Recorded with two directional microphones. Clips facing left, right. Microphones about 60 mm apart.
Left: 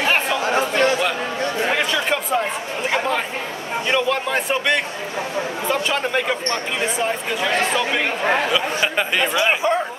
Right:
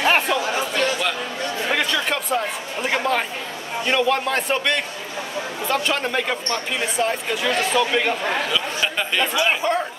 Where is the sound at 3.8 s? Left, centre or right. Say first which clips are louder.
Right 1 dB; centre.